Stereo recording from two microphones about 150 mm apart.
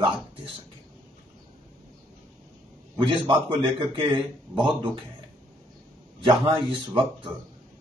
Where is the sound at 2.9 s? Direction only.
30° right (ahead or behind).